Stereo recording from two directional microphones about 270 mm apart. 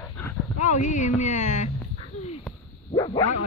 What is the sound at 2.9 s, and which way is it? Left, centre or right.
Bow-wow, centre.